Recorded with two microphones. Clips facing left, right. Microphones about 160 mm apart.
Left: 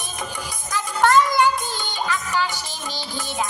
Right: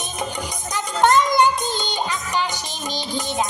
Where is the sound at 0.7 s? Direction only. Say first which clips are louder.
Right 1 dB; 20° right (ahead or behind).